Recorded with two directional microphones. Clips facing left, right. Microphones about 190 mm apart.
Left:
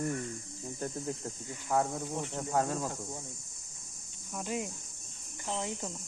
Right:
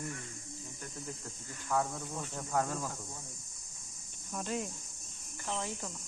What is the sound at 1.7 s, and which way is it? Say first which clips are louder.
Cricket: left 3 dB; 25° left (ahead or behind).